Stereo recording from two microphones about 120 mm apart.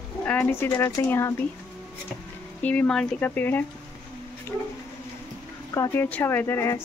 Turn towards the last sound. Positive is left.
turn(degrees=20)  # may be behind; listen again after turning